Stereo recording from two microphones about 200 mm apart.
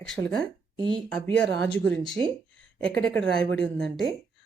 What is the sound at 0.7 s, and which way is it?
Speech, 25° right (ahead or behind).